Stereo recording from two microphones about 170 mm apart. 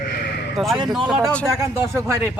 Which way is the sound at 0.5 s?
Centre (ahead or behind).